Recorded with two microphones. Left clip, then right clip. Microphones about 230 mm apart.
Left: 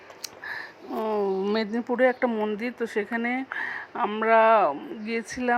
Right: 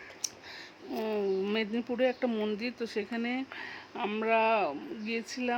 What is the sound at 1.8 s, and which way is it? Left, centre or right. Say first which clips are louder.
Speech: left 9 dB; centre.